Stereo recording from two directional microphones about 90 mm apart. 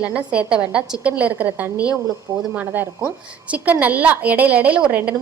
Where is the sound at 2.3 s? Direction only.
45° right (ahead or behind).